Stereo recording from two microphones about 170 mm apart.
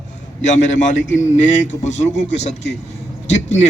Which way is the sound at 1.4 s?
45° left (ahead or behind).